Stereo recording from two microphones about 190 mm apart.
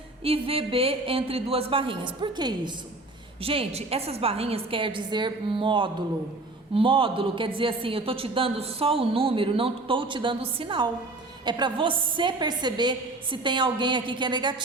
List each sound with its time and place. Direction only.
0.2 s a woman's voice: 30° right (ahead or behind)